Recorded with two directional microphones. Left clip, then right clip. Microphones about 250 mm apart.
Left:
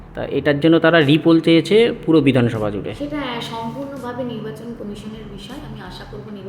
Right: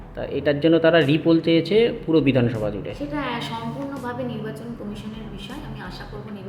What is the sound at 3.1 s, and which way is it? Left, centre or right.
Speech, centre.